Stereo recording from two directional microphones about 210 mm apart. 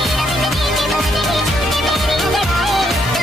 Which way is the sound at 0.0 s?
Centre (ahead or behind).